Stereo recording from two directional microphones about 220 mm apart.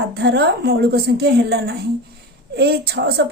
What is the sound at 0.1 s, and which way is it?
A woman's voice, 45° right (ahead or behind).